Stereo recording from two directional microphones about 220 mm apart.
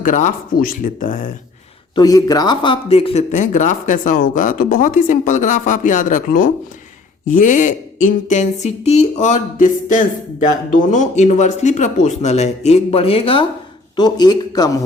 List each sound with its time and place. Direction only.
0.0 s speech: 35° left (ahead or behind)
2.0 s speech: 15° left (ahead or behind)